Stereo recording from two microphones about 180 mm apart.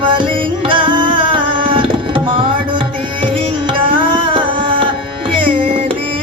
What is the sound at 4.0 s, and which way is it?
Music, 30° right (ahead or behind).